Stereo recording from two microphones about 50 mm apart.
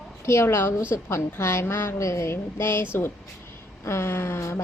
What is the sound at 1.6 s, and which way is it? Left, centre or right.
Speech, left.